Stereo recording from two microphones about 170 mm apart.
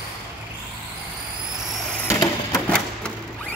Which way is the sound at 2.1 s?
20° left (ahead or behind).